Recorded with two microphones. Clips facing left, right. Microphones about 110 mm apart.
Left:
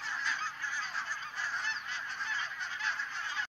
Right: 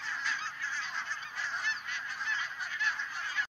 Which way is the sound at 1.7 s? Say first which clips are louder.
Right 1 dB; 35° left (ahead or behind).